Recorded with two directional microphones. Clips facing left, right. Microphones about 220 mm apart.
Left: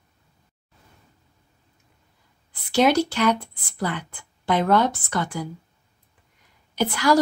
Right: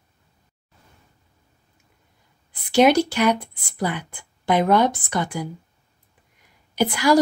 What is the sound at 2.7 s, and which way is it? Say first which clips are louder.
Speech: right 3 dB; 15° right (ahead or behind).